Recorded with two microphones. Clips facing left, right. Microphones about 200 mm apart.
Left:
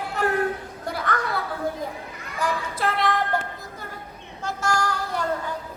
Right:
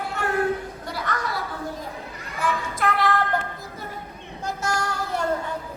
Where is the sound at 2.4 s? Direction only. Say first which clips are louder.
Even; 35° left (ahead or behind).